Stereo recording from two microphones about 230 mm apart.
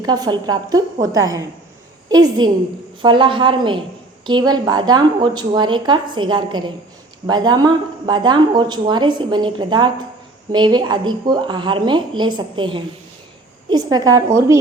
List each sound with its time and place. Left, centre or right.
0.0 s a woman's voice: centre